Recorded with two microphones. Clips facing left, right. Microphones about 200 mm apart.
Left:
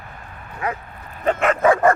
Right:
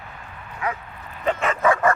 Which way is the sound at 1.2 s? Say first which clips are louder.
Left 4 dB; 50° left (ahead or behind).